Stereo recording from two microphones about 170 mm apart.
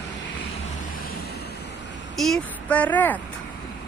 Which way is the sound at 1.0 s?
70° left (ahead or behind).